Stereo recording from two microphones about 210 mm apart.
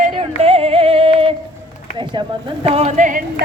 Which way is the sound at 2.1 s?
25° right (ahead or behind).